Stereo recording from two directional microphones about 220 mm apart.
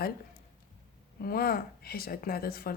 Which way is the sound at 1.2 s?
45° left (ahead or behind).